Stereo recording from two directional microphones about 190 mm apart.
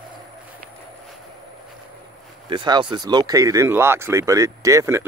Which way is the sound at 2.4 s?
25° right (ahead or behind).